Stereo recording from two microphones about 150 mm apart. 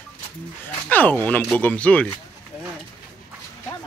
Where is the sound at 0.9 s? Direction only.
10° left (ahead or behind).